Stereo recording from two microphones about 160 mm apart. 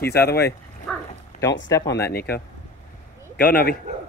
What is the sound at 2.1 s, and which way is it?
Speech, 75° left (ahead or behind).